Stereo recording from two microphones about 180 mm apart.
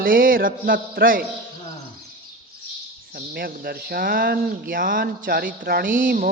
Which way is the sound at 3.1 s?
55° right (ahead or behind).